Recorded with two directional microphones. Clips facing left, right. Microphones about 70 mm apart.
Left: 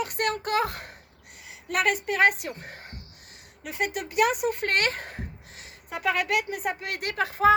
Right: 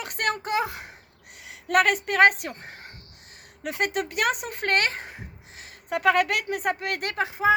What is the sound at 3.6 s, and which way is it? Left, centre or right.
Speech, right.